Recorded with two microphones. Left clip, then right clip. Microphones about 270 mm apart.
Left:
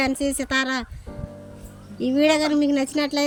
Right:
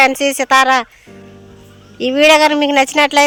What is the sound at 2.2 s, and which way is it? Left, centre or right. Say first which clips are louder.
Speech: right 11 dB; centre.